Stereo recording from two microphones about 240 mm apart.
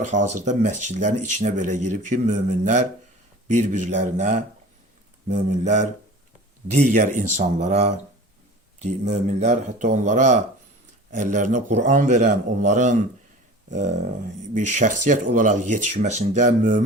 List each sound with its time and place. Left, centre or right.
0.0 s speech: right